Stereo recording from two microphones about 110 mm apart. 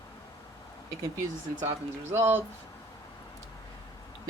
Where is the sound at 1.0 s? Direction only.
25° right (ahead or behind).